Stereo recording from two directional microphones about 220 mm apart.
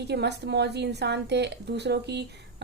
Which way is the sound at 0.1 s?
50° right (ahead or behind).